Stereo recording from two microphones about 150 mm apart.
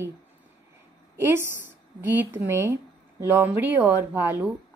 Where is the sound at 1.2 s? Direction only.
15° right (ahead or behind).